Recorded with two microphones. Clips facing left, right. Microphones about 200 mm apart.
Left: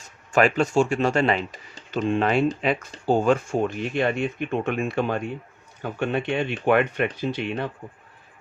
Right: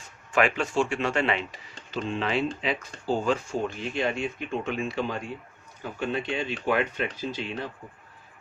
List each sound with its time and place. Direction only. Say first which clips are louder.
0.3 s speech: left 5 dB; 40° left (ahead or behind); by 7.7 s 65° left (ahead or behind)